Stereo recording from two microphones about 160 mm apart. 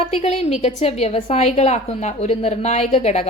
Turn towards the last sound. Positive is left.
turn(degrees=40)  # may be behind; listen again after turning